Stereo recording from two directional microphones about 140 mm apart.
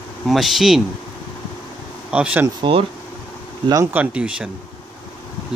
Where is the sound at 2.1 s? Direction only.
10° right (ahead or behind).